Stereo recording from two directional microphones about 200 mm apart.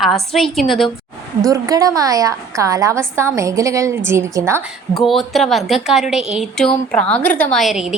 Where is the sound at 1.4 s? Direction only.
15° right (ahead or behind).